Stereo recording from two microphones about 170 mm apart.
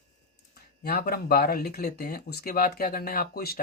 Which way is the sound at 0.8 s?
65° left (ahead or behind).